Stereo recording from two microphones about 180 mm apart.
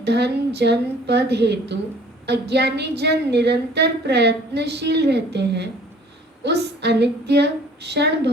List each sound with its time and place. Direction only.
0.0 s a woman's voice: 65° right (ahead or behind)